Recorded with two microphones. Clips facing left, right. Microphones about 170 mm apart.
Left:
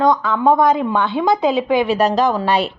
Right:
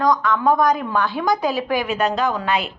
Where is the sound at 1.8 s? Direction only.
35° left (ahead or behind).